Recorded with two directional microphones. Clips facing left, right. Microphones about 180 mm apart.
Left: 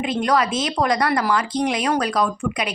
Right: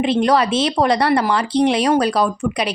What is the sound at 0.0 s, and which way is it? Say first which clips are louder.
A woman's voice: right 4 dB; 30° right (ahead or behind).